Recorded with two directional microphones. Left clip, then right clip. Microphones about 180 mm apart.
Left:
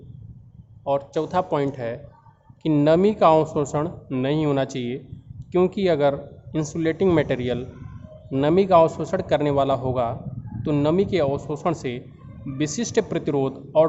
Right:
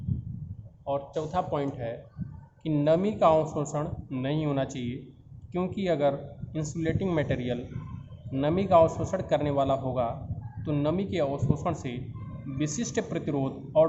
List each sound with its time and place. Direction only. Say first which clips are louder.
0.9 s speech: left 7 dB; 65° left (ahead or behind)
2.6 s speech: left 7 dB; 50° left (ahead or behind)